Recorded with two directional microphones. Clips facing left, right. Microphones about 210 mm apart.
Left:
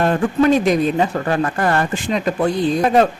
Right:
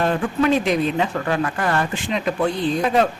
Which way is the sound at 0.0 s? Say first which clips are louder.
Left 4 dB; 45° left (ahead or behind).